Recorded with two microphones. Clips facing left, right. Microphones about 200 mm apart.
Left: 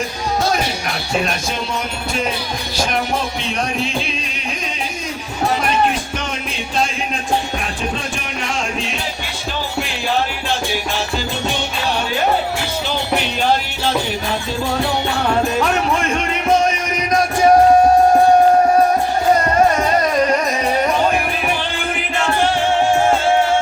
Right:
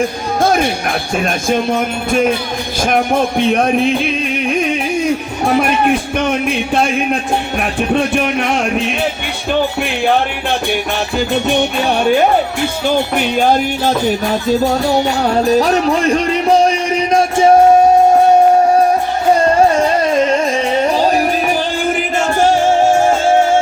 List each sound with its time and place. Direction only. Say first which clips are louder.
0.4 s speech: right 10 dB; 55° right (ahead or behind)
2.8 s music: right 7 dB; 55° right (ahead or behind)
5.5 s speech: right 7 dB; 60° right (ahead or behind)
7.6 s music: right 9 dB; 60° right (ahead or behind); by 17.5 s 30° right (ahead or behind)
19.7 s music: right 3 dB; 30° right (ahead or behind); by 22.9 s 45° right (ahead or behind)